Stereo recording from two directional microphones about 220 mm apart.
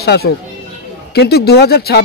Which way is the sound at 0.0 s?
45° left (ahead or behind).